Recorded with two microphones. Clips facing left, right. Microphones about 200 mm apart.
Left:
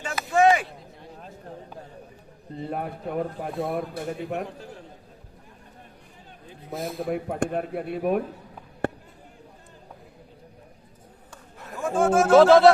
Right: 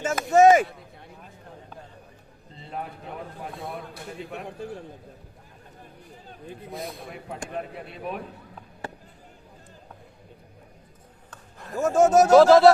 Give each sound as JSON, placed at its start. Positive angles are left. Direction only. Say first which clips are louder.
{"t": 0.0, "sound": "a sound", "louder": "right 3 dB", "side_deg": -45}
{"t": 2.6, "sound": "speech", "louder": "left 5 dB", "side_deg": 50}
{"t": 6.7, "sound": "speech", "louder": "left 5 dB", "side_deg": 0}
{"t": 7.0, "sound": "speech", "louder": "left 11 dB", "side_deg": 55}
{"t": 8.8, "sound": "a sound", "louder": "left 10 dB", "side_deg": 60}
{"t": 11.8, "sound": "speech", "louder": "right 3 dB", "side_deg": -45}
{"t": 12.4, "sound": "speech", "louder": "left 1 dB", "side_deg": 0}